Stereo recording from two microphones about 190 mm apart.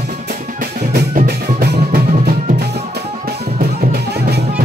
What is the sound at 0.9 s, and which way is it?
Music, 60° right (ahead or behind).